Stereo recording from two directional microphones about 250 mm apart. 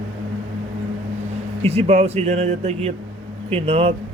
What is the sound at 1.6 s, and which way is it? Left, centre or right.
A man's voice, right.